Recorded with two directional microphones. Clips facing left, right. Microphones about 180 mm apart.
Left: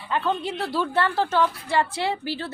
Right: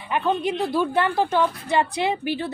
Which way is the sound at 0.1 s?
15° right (ahead or behind).